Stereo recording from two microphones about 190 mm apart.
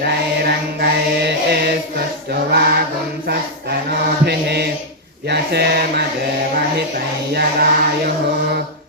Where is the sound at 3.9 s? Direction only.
60° right (ahead or behind).